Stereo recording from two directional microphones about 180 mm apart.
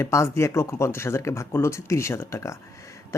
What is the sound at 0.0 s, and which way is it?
Speech, 15° left (ahead or behind).